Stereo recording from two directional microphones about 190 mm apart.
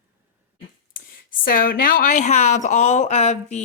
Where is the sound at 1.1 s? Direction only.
50° left (ahead or behind).